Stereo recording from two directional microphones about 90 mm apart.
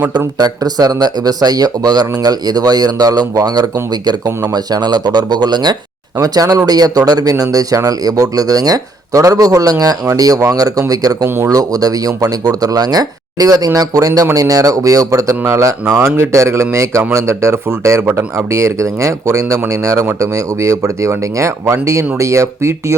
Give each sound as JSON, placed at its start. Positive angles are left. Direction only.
{"t": 0.3, "sound": "speech", "side_deg": -45}
{"t": 6.1, "sound": "speech", "side_deg": -40}